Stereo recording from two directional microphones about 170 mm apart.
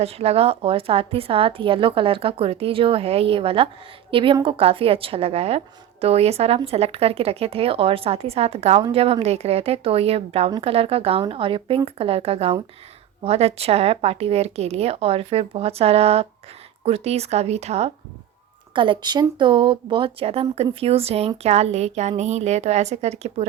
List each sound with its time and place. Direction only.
0.0 s a woman's voice: 35° right (ahead or behind)